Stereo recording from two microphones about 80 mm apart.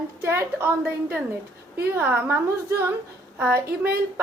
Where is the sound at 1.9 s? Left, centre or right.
Right.